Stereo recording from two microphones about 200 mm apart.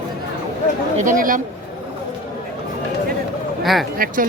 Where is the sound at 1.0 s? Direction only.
40° right (ahead or behind).